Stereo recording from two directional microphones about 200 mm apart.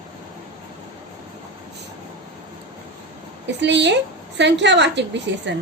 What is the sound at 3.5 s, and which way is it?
A woman's voice, 60° right (ahead or behind).